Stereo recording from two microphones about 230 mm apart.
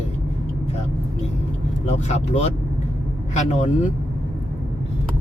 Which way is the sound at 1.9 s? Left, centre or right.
Left.